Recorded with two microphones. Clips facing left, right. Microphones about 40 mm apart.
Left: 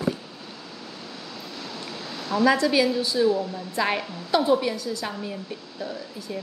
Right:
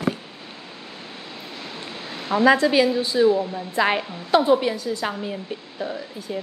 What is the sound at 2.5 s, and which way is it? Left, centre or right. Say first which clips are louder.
A woman's voice: right 3 dB; right.